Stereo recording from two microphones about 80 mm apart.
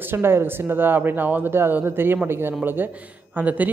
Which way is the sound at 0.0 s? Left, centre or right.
Right.